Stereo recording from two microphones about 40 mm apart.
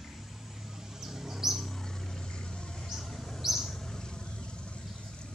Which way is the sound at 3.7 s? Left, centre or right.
Centre.